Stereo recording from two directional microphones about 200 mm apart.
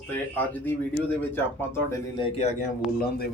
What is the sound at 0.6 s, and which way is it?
Speech, 10° left (ahead or behind).